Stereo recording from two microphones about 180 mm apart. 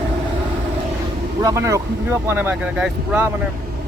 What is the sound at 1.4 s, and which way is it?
Speech, 15° right (ahead or behind).